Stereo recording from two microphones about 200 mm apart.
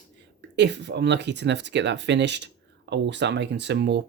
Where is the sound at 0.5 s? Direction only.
60° right (ahead or behind).